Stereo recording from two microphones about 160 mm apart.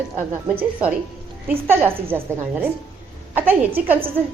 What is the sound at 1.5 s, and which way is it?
A woman's voice, 15° right (ahead or behind).